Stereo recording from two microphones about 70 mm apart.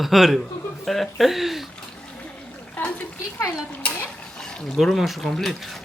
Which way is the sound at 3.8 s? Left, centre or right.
Left.